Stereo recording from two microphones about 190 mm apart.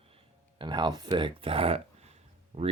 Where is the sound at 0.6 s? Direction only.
25° right (ahead or behind).